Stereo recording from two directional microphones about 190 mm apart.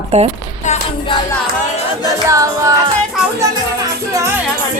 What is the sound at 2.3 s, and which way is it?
Music, 15° right (ahead or behind).